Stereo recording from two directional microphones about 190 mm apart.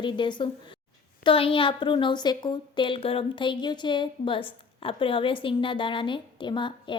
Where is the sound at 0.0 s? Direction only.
25° left (ahead or behind).